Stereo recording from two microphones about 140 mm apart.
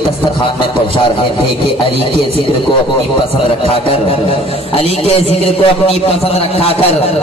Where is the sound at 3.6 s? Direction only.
45° left (ahead or behind).